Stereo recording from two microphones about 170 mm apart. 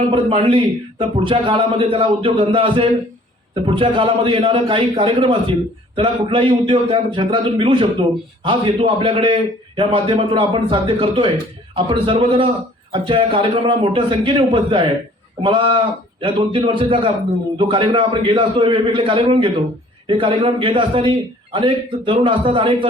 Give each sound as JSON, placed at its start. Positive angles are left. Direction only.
{"t": 0.1, "sound": "a man's voice", "side_deg": -30}